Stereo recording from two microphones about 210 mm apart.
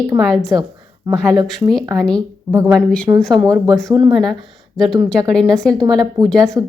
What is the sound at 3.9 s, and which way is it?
Speech, 20° right (ahead or behind).